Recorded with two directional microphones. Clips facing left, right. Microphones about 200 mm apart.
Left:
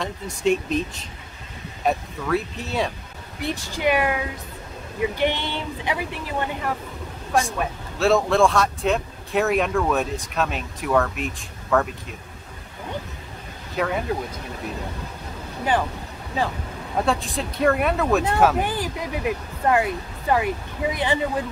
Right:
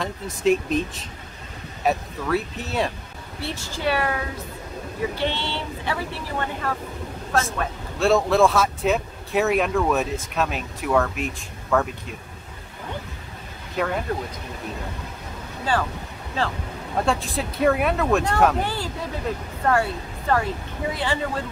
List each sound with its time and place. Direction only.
0.0 s speech: centre (ahead or behind)
3.3 s speech: 15° left (ahead or behind)
8.0 s speech: centre (ahead or behind)
13.7 s speech: centre (ahead or behind)
15.6 s speech: 20° left (ahead or behind)
17.0 s speech: centre (ahead or behind)
18.6 s speech: 15° left (ahead or behind)